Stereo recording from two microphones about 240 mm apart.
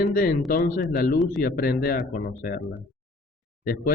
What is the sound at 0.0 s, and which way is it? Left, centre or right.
Speech, left.